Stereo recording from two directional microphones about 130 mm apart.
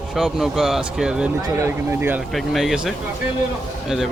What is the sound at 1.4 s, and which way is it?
Speech, 20° right (ahead or behind).